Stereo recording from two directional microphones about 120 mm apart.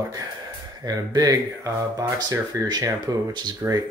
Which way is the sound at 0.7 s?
30° right (ahead or behind).